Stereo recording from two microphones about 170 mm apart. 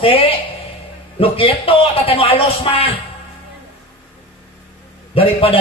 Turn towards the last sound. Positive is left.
turn(degrees=35)  # may be behind; listen again after turning